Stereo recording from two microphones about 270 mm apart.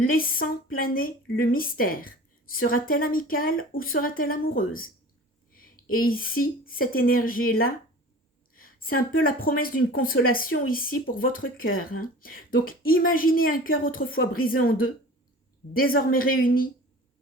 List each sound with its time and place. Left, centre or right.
0.1 s speech: left
5.9 s speech: left
8.5 s speech: left